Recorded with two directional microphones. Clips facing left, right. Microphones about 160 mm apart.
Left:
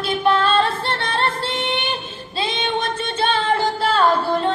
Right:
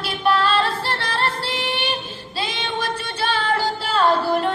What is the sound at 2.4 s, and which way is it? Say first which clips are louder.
Child singing: left 3 dB; 25° left (ahead or behind).